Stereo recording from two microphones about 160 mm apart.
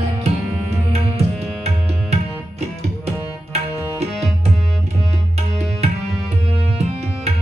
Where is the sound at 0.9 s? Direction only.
40° right (ahead or behind).